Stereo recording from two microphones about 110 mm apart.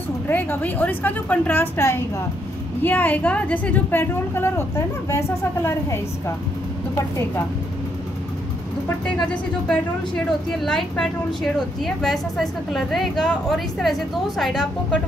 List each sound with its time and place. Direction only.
0.3 s a woman's voice: 15° left (ahead or behind)
9.3 s a woman's voice: 5° left (ahead or behind)